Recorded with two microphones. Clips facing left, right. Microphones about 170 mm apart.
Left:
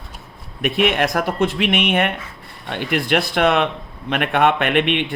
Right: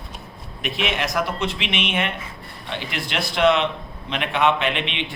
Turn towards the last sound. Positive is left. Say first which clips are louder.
# left 7 dB
turn(degrees=55)  # may be behind; listen again after turning